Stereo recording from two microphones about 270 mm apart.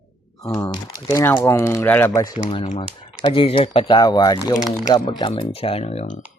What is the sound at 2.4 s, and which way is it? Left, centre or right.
Speech, left.